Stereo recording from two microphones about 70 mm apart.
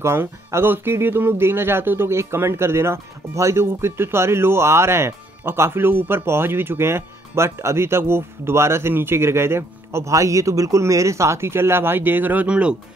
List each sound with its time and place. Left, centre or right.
0.0 s speech: right
12.4 s speech: centre